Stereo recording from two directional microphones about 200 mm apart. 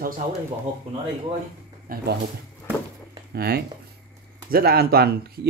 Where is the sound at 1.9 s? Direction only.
45° right (ahead or behind).